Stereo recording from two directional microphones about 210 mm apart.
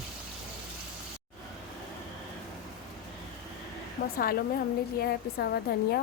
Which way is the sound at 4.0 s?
45° left (ahead or behind).